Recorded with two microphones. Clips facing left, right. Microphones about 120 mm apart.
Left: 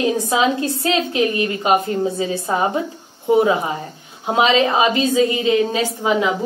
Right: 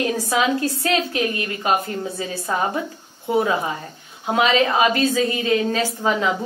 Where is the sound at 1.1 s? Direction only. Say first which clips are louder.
Left 5 dB; 25° left (ahead or behind).